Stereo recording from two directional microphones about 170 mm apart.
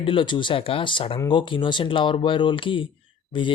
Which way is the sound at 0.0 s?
30° left (ahead or behind).